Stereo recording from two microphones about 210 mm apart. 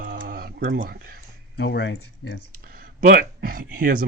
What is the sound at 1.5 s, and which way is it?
Speech, 55° left (ahead or behind).